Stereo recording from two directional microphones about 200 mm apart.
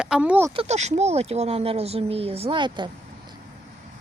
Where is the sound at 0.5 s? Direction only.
30° right (ahead or behind).